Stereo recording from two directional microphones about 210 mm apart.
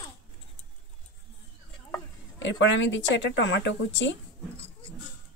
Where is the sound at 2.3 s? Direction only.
60° left (ahead or behind).